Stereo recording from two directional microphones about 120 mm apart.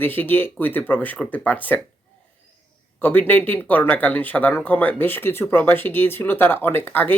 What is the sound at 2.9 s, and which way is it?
Speech, 15° left (ahead or behind).